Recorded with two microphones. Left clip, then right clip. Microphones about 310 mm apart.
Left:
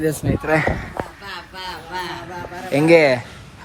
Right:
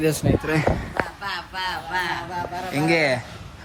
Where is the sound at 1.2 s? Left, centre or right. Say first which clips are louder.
Right 4 dB; centre.